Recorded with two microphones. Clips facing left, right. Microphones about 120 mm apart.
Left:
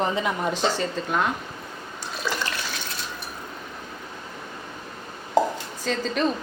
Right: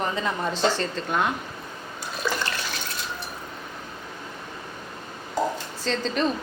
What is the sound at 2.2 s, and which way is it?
Water, centre (ahead or behind).